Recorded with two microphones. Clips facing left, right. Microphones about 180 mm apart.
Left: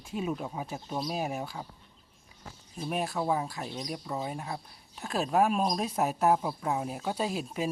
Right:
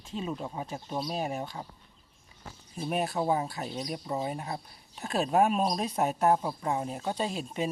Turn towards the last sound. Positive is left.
turn(degrees=5)  # may be behind; listen again after turning